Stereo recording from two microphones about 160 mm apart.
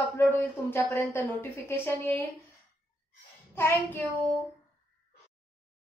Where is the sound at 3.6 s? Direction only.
10° left (ahead or behind).